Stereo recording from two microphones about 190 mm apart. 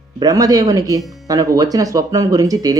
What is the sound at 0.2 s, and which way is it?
Speech, 20° right (ahead or behind).